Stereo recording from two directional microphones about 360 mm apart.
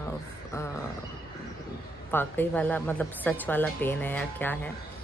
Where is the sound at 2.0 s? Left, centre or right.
Centre.